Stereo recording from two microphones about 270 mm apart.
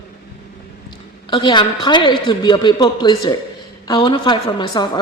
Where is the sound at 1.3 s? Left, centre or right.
Centre.